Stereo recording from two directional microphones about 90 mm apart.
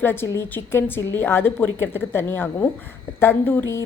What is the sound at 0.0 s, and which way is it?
A woman's voice, 25° left (ahead or behind).